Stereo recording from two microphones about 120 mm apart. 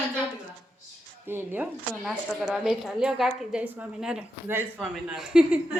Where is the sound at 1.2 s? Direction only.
15° right (ahead or behind).